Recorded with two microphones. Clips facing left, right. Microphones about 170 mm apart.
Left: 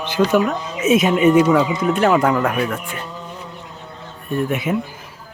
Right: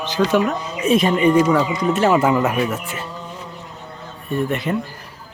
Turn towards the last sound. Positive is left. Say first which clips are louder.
# left 1 dB
turn(degrees=5)  # may be behind; listen again after turning